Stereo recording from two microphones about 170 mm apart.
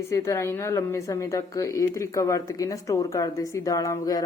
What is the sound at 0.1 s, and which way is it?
Speech, 20° left (ahead or behind).